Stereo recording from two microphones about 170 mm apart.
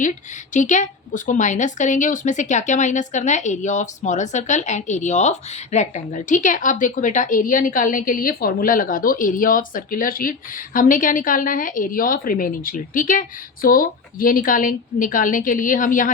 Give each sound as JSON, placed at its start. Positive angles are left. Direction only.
{"t": 0.5, "sound": "a woman's voice", "side_deg": 45}